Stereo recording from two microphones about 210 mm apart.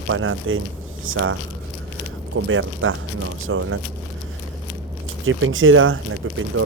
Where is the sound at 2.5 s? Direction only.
70° right (ahead or behind).